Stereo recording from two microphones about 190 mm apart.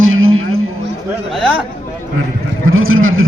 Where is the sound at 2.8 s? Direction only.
90° right.